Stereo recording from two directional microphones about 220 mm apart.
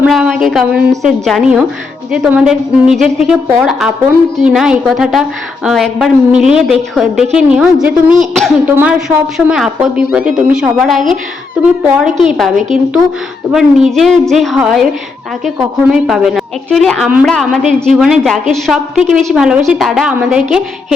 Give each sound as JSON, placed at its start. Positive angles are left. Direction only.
{"t": 0.0, "sound": "a woman's voice", "side_deg": 0}